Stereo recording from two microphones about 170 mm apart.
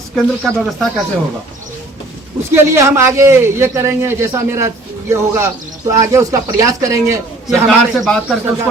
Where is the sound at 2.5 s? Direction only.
15° right (ahead or behind).